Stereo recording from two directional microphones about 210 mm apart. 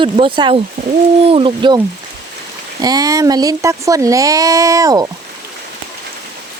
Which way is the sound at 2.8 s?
15° right (ahead or behind).